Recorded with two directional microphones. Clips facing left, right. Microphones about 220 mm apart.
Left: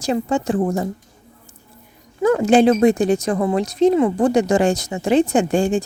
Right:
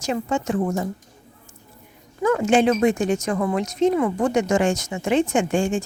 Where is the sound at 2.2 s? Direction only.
35° left (ahead or behind).